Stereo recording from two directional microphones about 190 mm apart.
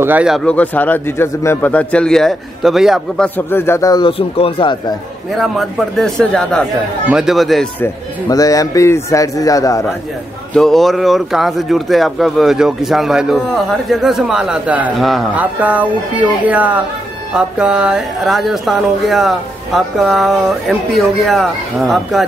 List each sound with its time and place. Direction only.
0.0 s speech: 5° right (ahead or behind)
0.5 s speech: 10° left (ahead or behind)
3.3 s speech: 10° left (ahead or behind)
5.3 s speech: centre (ahead or behind)
7.8 s speech: 20° left (ahead or behind)
10.5 s speech: centre (ahead or behind)